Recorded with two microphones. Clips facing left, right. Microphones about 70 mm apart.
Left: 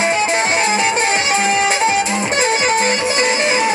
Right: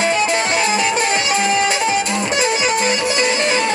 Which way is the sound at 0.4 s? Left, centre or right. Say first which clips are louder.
Left 1 dB; left.